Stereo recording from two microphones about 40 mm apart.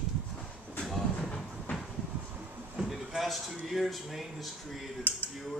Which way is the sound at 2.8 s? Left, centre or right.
Right.